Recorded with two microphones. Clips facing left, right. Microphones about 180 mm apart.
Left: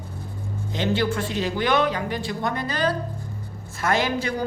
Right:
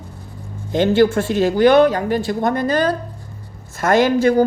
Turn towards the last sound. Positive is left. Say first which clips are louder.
# right 10 dB
turn(degrees=-45)  # may be behind; listen again after turning